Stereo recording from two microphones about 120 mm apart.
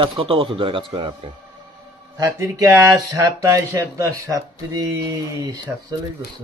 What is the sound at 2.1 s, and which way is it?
Speech, 25° right (ahead or behind).